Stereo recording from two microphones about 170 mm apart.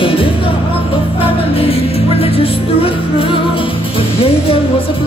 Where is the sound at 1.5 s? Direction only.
35° left (ahead or behind).